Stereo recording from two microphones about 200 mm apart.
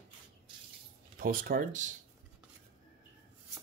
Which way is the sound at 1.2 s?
45° right (ahead or behind).